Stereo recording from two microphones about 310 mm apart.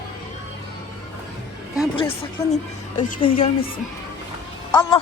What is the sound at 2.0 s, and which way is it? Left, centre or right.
Speech, centre.